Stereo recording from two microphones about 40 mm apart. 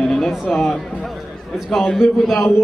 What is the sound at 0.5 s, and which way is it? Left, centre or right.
A man's voice, centre.